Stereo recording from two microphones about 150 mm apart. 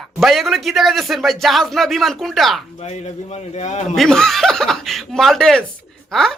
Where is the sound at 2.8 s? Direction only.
45° left (ahead or behind).